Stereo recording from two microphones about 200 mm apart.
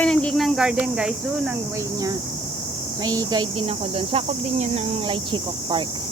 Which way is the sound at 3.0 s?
20° right (ahead or behind).